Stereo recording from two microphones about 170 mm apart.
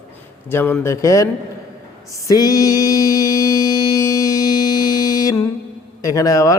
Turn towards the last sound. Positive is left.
turn(degrees=20)  # may be behind; listen again after turning